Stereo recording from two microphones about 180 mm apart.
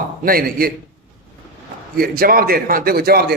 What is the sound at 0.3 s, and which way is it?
Speech, 55° right (ahead or behind).